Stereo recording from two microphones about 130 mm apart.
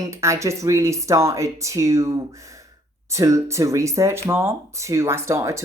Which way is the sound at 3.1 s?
25° right (ahead or behind).